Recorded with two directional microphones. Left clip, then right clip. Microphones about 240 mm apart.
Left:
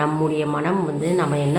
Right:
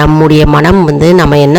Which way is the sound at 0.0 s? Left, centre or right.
Right.